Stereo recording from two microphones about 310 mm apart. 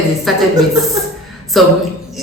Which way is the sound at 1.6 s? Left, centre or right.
Centre.